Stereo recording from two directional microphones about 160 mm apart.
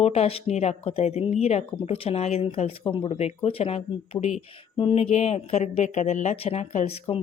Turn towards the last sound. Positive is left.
turn(degrees=40)  # may be behind; listen again after turning